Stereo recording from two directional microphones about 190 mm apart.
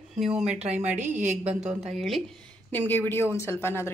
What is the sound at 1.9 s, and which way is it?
A woman's voice, centre (ahead or behind).